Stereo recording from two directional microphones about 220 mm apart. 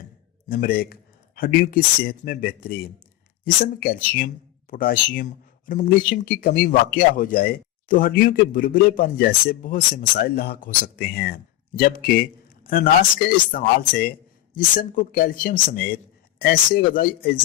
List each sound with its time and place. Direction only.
0.4 s a man's voice: 40° left (ahead or behind)